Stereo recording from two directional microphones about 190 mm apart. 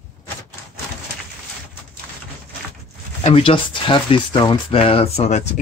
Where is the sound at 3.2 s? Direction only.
30° left (ahead or behind).